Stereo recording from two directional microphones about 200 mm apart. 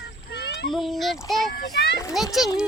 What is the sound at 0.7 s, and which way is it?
Speech, centre (ahead or behind).